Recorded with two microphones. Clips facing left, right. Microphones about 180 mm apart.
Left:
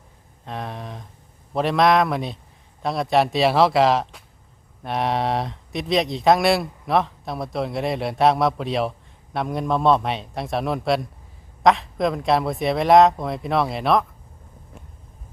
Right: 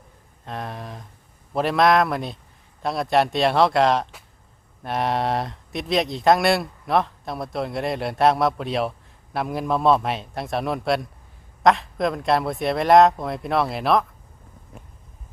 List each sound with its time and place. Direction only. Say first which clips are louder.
0.4 s speech: left 1 dB; centre (ahead or behind)